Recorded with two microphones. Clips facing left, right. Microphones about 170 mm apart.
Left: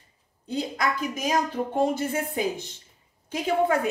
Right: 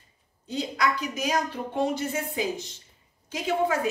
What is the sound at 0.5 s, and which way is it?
A woman's voice, 55° left (ahead or behind).